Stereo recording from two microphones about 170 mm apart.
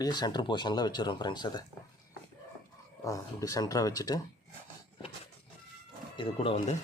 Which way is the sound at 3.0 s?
20° left (ahead or behind).